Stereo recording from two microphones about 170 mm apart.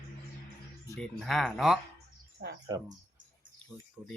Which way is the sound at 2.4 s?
90° right.